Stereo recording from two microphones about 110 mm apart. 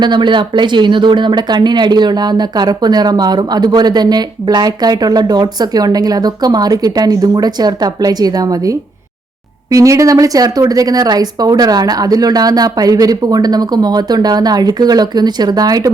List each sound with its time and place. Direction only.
0.0 s speech: 45° right (ahead or behind)
9.7 s speech: 30° right (ahead or behind)